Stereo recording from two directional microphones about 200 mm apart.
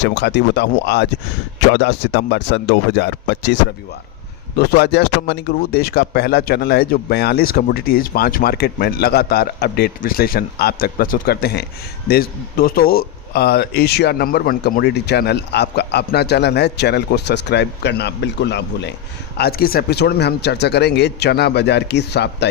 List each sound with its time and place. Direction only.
0.0 s speech: 60° left (ahead or behind)
19.4 s speech: 50° left (ahead or behind)